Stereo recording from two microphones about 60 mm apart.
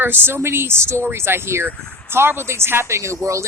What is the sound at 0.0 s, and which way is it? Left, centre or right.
Speech, right.